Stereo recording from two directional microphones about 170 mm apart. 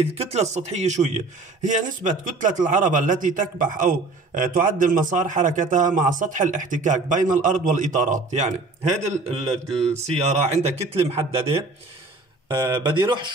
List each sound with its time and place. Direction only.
0.0 s a man's voice: 35° right (ahead or behind)